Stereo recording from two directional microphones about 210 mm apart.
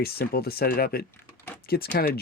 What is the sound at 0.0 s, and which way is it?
Speech, 45° left (ahead or behind).